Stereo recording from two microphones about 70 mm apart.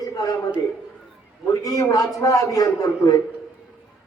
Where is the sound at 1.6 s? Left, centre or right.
Left.